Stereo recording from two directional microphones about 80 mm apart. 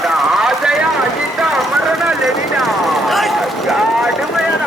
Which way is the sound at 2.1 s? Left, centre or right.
Centre.